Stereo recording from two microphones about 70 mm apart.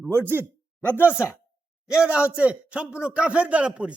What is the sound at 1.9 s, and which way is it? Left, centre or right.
A man's voice, centre.